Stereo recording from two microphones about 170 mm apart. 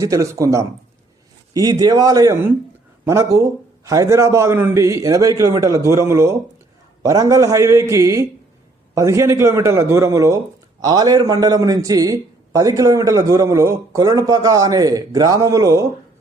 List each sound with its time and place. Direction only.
0.0 s a man's voice: 20° right (ahead or behind)